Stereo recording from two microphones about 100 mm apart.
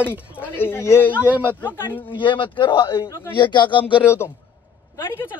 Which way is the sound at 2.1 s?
55° left (ahead or behind).